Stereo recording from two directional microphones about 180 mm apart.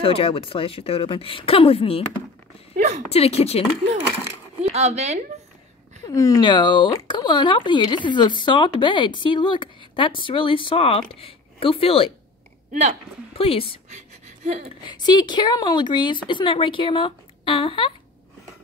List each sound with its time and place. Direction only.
0.0 s speech: 30° left (ahead or behind)
3.1 s speech: 35° left (ahead or behind)
4.6 s speech: 35° right (ahead or behind)
6.0 s speech: 20° left (ahead or behind)
13.3 s speech: 30° left (ahead or behind)
13.9 s gasp: 40° right (ahead or behind)
14.9 s speech: 25° left (ahead or behind)